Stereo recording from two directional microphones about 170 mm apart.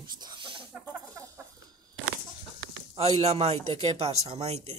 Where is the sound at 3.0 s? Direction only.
35° right (ahead or behind).